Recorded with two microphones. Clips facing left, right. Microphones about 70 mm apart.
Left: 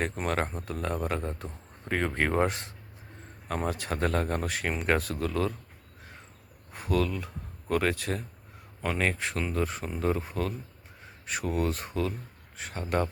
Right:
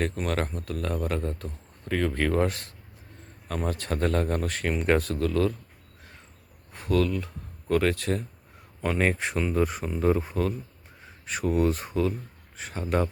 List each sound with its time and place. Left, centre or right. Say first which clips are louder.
0.3 s a man's voice: right 1 dB; centre
6.7 s a man's voice: right 3 dB; centre